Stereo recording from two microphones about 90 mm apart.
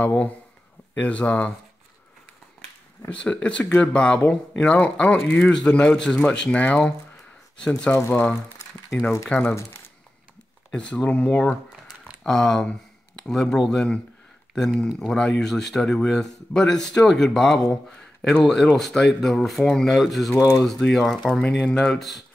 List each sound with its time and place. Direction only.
0.0 s speech: 15° left (ahead or behind)
3.1 s speech: 15° left (ahead or behind)
8.1 s speech: 10° left (ahead or behind)
10.7 s speech: 10° left (ahead or behind)